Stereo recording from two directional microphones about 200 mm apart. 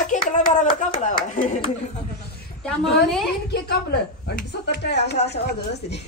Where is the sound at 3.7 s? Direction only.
55° left (ahead or behind).